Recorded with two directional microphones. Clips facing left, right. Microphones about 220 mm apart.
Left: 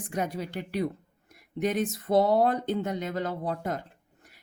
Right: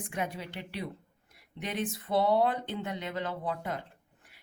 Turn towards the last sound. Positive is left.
turn(degrees=40)  # may be behind; listen again after turning